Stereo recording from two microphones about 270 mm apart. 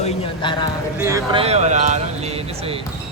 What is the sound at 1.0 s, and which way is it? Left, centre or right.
Speech, centre.